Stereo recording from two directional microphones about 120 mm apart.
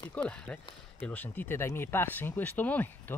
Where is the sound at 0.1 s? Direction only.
10° left (ahead or behind).